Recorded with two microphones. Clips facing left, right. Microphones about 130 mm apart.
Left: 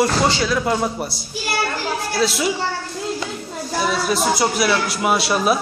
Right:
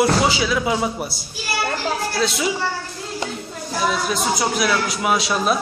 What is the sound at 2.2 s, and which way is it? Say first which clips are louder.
Speech: left 3 dB; centre (ahead or behind).